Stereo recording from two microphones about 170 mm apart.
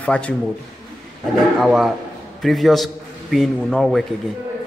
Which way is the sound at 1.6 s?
Centre (ahead or behind).